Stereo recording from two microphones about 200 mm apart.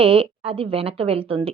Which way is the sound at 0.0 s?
30° right (ahead or behind).